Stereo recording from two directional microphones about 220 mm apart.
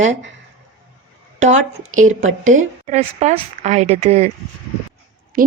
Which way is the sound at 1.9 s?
35° right (ahead or behind).